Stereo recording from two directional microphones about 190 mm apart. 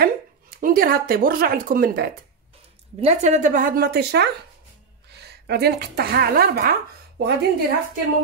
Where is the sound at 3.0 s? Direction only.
35° right (ahead or behind); by 6.7 s 55° right (ahead or behind).